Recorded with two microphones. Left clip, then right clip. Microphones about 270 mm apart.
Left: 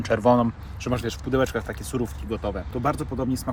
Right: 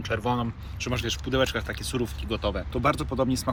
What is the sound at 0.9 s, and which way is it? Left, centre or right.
Speech, centre.